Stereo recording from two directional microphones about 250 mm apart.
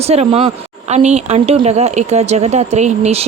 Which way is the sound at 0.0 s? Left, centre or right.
Right.